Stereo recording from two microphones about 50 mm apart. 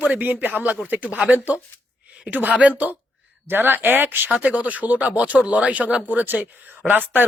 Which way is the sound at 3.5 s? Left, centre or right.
Right.